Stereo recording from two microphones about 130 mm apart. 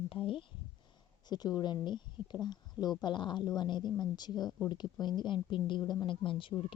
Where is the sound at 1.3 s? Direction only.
30° left (ahead or behind).